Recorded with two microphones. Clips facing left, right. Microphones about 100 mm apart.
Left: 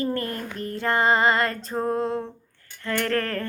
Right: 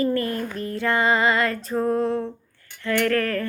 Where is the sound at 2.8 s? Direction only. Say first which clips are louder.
Right 4 dB; 25° left (ahead or behind).